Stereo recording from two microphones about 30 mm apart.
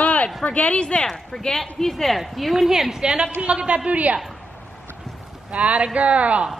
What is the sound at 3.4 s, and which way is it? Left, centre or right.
Speech, right.